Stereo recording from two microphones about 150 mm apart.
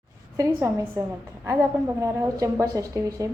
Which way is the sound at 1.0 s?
20° right (ahead or behind).